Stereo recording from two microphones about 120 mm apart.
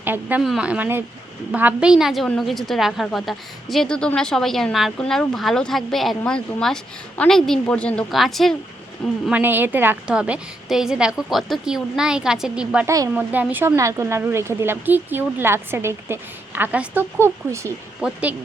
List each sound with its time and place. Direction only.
0.0 s a woman's voice: 15° right (ahead or behind); by 8.5 s centre (ahead or behind)
9.3 s a woman's voice: 15° right (ahead or behind)
12.8 s speech: 30° right (ahead or behind)
13.1 s speech: 15° right (ahead or behind)
18.0 s a woman's voice: 10° right (ahead or behind)